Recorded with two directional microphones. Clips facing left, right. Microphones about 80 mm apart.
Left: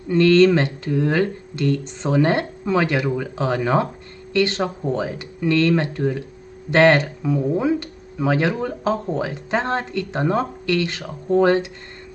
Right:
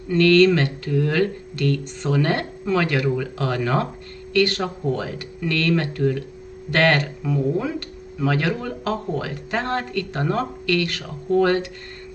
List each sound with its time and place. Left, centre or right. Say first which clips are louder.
0.1 s speech: left 1 dB; left